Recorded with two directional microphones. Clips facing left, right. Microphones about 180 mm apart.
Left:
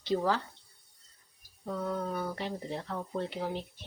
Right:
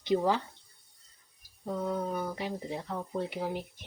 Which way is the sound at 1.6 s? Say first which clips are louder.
Right 1 dB; 10° right (ahead or behind).